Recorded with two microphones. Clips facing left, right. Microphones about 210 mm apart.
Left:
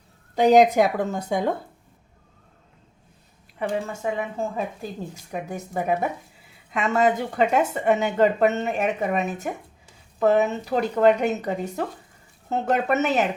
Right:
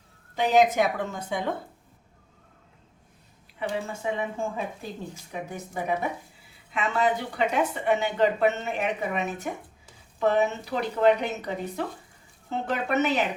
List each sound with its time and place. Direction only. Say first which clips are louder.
0.3 s speech: left 5 dB; 40° left (ahead or behind)
3.6 s speech: left 4 dB; 45° left (ahead or behind)